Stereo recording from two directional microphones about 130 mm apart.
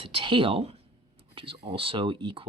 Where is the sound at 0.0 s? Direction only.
40° right (ahead or behind).